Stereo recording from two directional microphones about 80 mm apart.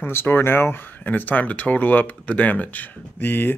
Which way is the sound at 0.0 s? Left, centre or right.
Left.